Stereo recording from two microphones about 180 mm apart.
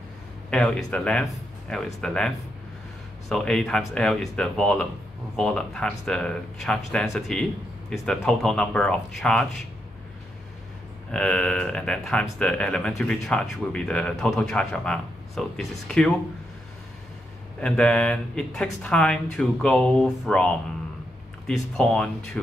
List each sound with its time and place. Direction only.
0.5 s speech: 5° left (ahead or behind)
11.1 s speech: 5° left (ahead or behind)
17.6 s speech: 5° left (ahead or behind)